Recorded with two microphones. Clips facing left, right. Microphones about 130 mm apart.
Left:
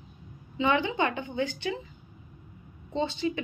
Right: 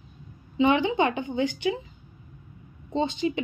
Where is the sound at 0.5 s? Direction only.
20° right (ahead or behind).